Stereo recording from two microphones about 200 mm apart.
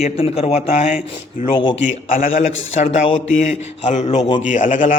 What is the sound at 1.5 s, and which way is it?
Speech, 25° left (ahead or behind).